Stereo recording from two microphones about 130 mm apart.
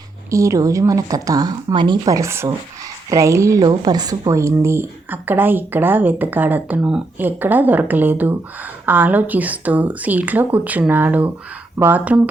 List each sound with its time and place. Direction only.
0.3 s a woman's voice: 25° right (ahead or behind)